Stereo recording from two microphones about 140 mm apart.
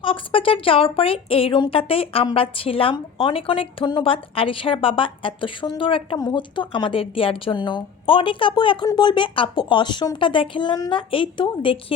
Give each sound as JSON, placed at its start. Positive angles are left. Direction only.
{"t": 0.0, "sound": "speech", "side_deg": 40}